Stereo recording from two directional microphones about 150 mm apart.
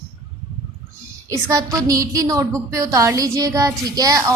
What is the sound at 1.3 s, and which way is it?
A woman's voice, 20° right (ahead or behind).